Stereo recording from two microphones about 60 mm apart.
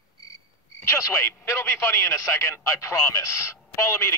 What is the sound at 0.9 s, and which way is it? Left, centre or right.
Speech, left.